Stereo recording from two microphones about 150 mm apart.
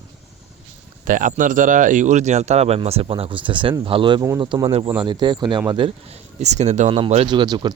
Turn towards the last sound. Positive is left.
turn(degrees=-30)  # may be behind; listen again after turning